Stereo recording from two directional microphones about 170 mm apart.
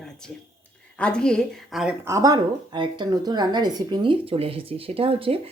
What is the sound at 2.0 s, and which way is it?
A woman's voice, 20° right (ahead or behind).